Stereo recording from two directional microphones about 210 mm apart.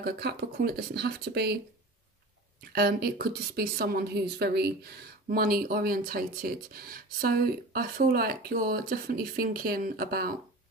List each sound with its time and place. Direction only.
0.0 s speech: 50° right (ahead or behind)
2.7 s speech: 50° right (ahead or behind)